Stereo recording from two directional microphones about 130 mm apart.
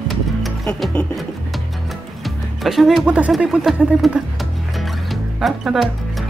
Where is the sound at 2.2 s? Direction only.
Centre (ahead or behind).